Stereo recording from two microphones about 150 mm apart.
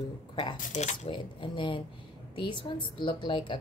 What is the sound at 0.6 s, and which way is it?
Speech, 55° left (ahead or behind).